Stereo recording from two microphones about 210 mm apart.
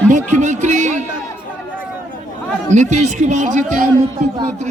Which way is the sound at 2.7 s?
35° right (ahead or behind).